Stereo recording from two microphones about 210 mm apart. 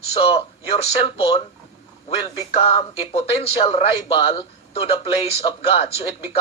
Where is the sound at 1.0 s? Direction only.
25° left (ahead or behind).